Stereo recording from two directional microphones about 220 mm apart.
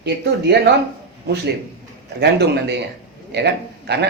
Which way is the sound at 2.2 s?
50° right (ahead or behind).